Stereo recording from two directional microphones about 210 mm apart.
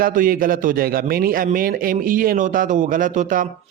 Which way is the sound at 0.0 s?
40° right (ahead or behind).